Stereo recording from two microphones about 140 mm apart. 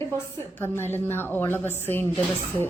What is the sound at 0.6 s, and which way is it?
A woman's voice, 15° left (ahead or behind).